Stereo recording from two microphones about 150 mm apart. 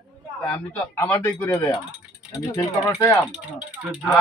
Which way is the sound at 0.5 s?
10° left (ahead or behind).